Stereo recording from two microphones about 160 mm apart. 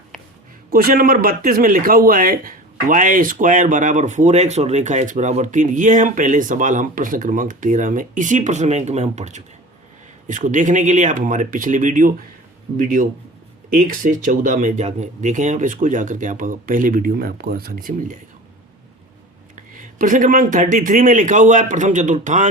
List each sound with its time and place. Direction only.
0.7 s a man's voice: 65° right (ahead or behind)
19.7 s a man's voice: 55° right (ahead or behind)